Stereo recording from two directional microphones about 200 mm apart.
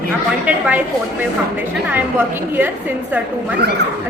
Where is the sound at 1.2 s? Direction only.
10° right (ahead or behind).